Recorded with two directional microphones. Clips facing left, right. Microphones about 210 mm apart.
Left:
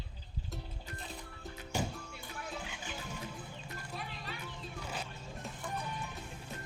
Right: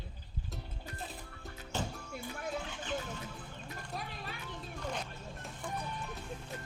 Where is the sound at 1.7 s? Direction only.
10° left (ahead or behind).